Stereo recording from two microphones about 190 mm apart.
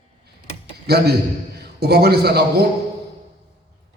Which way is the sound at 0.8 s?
60° right (ahead or behind).